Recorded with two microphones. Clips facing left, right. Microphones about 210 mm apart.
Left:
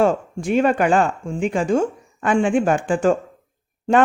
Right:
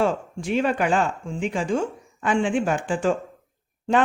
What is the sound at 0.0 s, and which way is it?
Speech, 50° left (ahead or behind).